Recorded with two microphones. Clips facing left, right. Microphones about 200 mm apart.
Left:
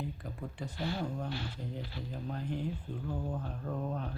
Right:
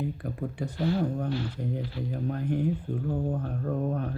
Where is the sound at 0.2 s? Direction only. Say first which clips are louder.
Right 9 dB; 55° right (ahead or behind).